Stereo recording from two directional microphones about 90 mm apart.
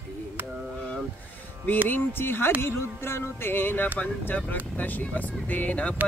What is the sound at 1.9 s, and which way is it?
Speech, 25° left (ahead or behind).